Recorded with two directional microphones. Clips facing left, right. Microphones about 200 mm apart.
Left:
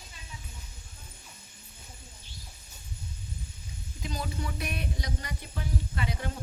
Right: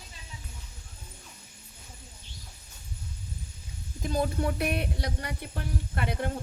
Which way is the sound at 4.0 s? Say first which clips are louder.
Right 8 dB; 50° right (ahead or behind).